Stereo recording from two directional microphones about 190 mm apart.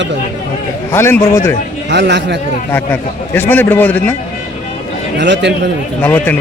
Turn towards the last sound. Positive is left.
turn(degrees=10)  # may be behind; listen again after turning